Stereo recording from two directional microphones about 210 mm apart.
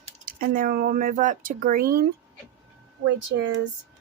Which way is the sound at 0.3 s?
45° right (ahead or behind).